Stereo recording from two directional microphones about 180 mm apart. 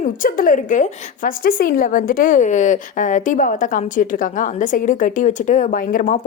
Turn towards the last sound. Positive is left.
turn(degrees=50)  # may be behind; listen again after turning